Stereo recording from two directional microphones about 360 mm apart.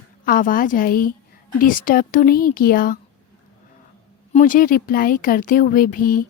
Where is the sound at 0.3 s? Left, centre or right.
Left.